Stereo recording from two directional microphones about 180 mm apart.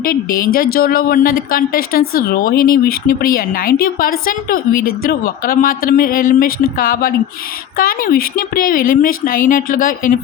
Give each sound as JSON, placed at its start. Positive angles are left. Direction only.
{"t": 0.0, "sound": "speech", "side_deg": 55}